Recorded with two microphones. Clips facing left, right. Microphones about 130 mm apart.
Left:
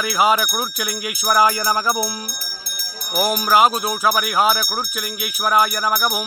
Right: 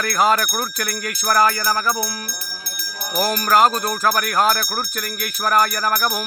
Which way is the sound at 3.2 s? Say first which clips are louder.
Even; 5° left (ahead or behind).